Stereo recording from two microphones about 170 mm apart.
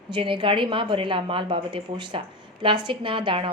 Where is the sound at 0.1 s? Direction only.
30° right (ahead or behind).